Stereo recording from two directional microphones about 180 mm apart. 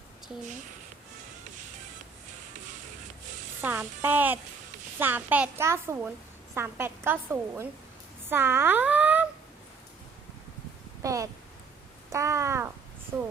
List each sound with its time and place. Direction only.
3.6 s a woman's voice: 10° right (ahead or behind)
11.0 s a sound: 20° right (ahead or behind)
13.1 s a woman's voice: 15° right (ahead or behind)